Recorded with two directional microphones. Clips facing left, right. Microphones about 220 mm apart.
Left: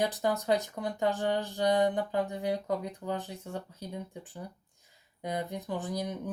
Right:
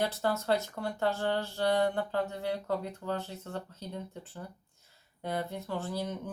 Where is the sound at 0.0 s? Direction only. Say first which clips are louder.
Left 1 dB; 15° left (ahead or behind).